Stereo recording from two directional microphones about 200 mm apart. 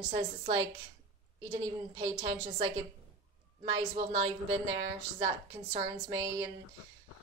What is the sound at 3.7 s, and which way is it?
Speech, 30° right (ahead or behind).